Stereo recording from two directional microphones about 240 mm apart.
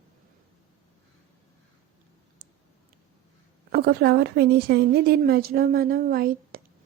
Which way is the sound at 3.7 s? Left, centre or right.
Right.